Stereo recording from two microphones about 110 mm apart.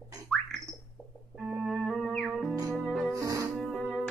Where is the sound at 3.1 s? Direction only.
30° right (ahead or behind).